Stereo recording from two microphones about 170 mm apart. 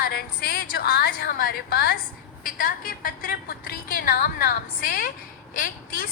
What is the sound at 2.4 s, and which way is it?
A woman's voice, 55° left (ahead or behind).